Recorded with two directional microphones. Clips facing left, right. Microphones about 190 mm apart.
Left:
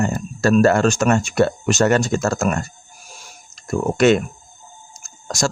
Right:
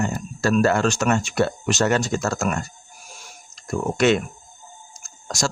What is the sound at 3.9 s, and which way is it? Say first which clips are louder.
Speech: left 4 dB; 45° left (ahead or behind).